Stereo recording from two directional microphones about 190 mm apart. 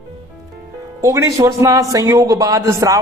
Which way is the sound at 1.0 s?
15° right (ahead or behind).